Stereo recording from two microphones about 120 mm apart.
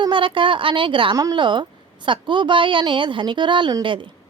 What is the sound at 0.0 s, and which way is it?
A woman's voice, 45° right (ahead or behind).